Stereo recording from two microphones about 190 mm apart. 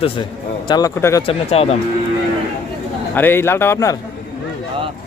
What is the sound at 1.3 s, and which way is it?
Speech, 30° left (ahead or behind).